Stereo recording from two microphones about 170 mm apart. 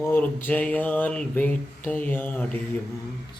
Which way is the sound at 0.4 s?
10° left (ahead or behind).